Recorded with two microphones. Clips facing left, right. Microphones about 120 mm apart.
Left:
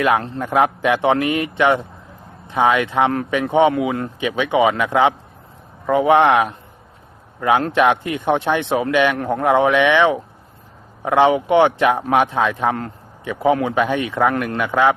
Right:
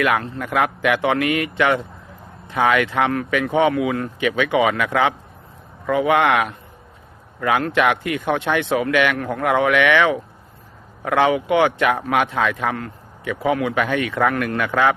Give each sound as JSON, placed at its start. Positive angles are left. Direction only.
{"t": 0.0, "sound": "a man's voice", "side_deg": 30}